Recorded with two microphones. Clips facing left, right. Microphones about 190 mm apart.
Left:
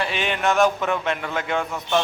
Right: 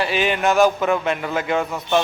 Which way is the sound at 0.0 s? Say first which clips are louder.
Right 4 dB; 5° right (ahead or behind).